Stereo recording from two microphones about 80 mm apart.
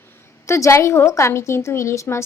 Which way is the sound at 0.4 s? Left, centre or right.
Left.